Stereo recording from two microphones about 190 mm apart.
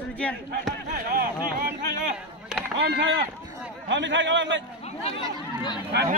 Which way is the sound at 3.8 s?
75° right (ahead or behind).